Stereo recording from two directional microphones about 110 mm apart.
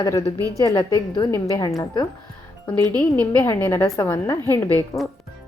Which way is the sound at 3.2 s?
20° left (ahead or behind).